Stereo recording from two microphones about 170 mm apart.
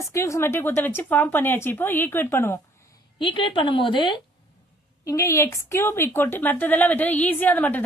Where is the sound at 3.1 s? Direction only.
30° left (ahead or behind).